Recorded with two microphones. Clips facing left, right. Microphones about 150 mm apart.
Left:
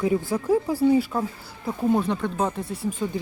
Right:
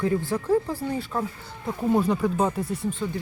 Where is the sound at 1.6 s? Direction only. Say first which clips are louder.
Even; centre (ahead or behind).